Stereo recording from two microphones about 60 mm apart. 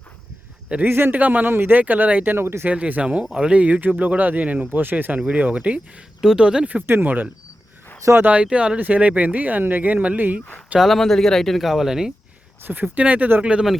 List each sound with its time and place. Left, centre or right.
0.9 s speech: right
1.8 s speech: right
2.6 s speech: right
6.2 s speech: centre
6.8 s speech: right
10.8 s speech: centre
11.7 s speech: centre
12.6 s speech: right